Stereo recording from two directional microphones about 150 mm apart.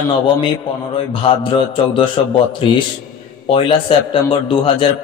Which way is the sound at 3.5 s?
35° left (ahead or behind).